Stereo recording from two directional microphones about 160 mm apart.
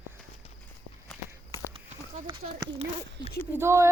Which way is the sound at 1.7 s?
40° right (ahead or behind).